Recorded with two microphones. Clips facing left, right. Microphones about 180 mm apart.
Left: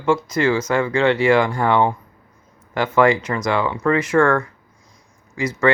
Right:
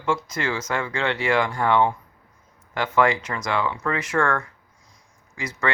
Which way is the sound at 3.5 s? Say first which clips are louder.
Left 3 dB; 40° left (ahead or behind).